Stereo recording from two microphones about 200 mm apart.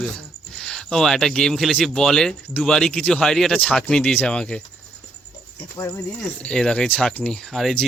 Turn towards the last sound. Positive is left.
turn(degrees=0)  # may be behind; listen again after turning